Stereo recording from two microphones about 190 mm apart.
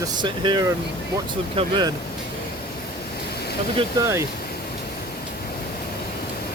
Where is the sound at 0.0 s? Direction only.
25° right (ahead or behind).